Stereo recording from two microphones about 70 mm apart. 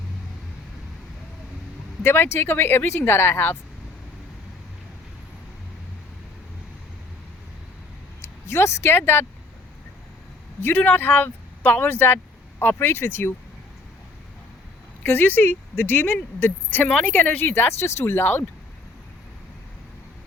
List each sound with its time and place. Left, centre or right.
2.0 s speech: left
8.4 s speech: left
10.6 s speech: left
15.0 s speech: left